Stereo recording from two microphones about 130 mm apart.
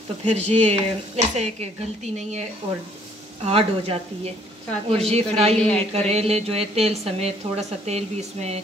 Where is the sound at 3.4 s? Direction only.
50° right (ahead or behind).